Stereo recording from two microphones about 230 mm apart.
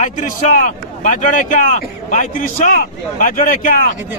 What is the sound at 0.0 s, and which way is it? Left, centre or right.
Speech, left.